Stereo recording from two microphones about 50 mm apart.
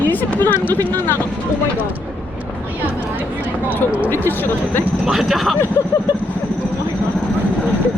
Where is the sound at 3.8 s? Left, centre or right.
Left.